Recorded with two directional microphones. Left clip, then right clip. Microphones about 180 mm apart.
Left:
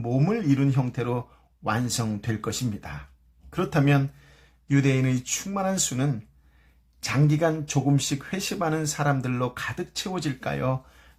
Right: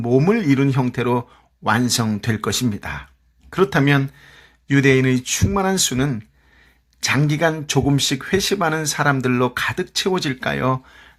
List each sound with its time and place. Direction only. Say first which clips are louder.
0.0 s speech: right 9 dB; 25° right (ahead or behind)